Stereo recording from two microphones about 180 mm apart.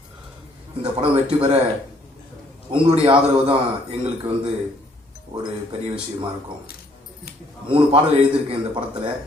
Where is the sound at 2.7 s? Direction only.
25° right (ahead or behind).